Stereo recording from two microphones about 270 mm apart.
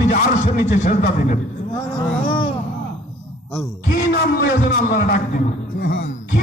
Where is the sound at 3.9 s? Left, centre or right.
Left.